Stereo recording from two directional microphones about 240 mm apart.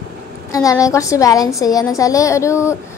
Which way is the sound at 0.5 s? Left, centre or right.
Centre.